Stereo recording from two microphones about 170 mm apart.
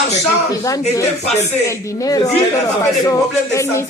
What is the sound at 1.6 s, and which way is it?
Speech, 20° left (ahead or behind).